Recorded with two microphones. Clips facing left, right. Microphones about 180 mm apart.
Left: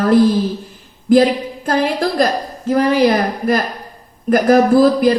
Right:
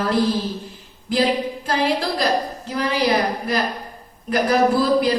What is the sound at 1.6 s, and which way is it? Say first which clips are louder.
A woman's voice: left 6 dB; 50° left (ahead or behind).